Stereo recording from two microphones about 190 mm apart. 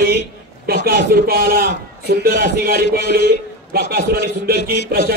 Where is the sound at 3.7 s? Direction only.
55° right (ahead or behind).